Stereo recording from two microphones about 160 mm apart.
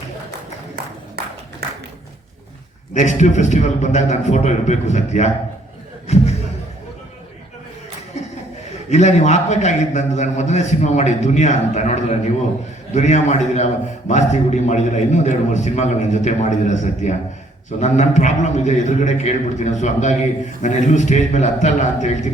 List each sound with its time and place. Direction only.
2.9 s a man's voice: 50° left (ahead or behind)
6.1 s a sound: 45° left (ahead or behind)
8.9 s a man's voice: 45° left (ahead or behind)